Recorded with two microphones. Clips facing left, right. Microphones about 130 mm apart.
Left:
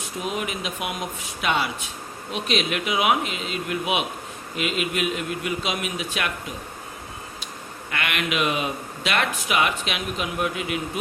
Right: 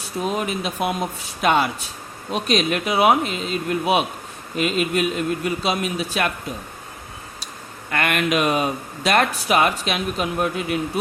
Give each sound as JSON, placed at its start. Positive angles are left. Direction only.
{"t": 0.2, "sound": "speech", "side_deg": -35}
{"t": 7.9, "sound": "speech", "side_deg": -45}